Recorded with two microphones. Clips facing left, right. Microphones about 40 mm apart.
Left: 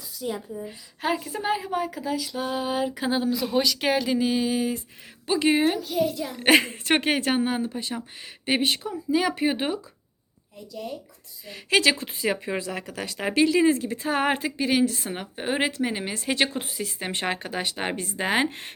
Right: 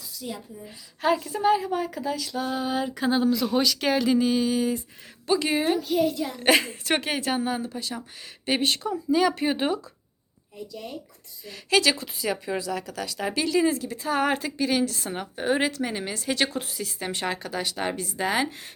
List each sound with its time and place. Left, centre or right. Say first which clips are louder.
0.2 s speech: left 6 dB; left
5.8 s a child's voice: right 2 dB; centre
6.4 s speech: left 2 dB; left
8.4 s speech: even; centre
11.4 s speech: left 1 dB; left